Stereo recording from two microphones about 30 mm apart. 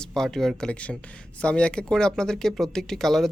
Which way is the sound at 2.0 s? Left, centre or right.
Left.